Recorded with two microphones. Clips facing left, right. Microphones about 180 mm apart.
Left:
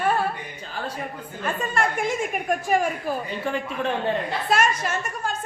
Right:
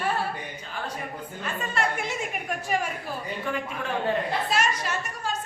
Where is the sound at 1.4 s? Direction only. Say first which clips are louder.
Left 4 dB; 50° left (ahead or behind).